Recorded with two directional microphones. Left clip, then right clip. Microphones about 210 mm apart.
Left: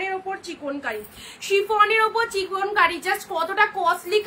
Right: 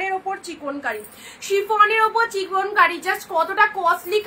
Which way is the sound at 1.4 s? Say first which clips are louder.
Right 2 dB; 20° left (ahead or behind).